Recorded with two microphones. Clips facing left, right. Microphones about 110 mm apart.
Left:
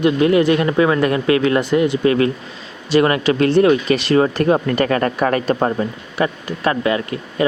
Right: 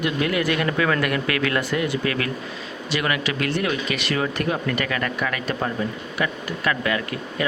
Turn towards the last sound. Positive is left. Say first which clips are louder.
# left 6 dB
turn(degrees=30)  # may be behind; listen again after turning